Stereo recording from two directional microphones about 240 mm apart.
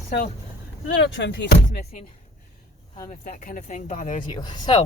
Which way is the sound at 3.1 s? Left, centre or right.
Left.